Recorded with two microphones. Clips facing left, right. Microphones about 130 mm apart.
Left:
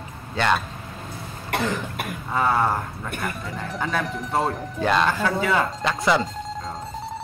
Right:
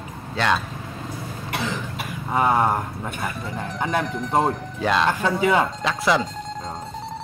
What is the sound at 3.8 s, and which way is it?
Speech, 20° right (ahead or behind).